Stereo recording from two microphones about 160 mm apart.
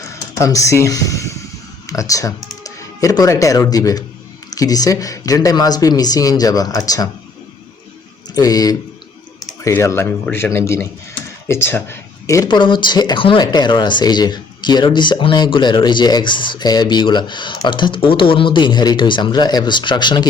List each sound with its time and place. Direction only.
0.1 s speech: 20° left (ahead or behind)
8.4 s speech: 25° left (ahead or behind)